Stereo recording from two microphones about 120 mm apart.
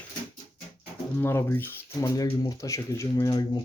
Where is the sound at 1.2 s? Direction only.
20° left (ahead or behind).